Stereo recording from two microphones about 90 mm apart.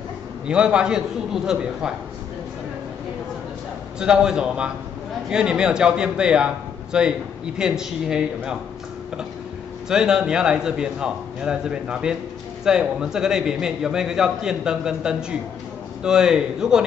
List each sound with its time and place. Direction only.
0.5 s a man's voice: 10° right (ahead or behind)
4.0 s a man's voice: 10° right (ahead or behind)
9.8 s a man's voice: 5° right (ahead or behind)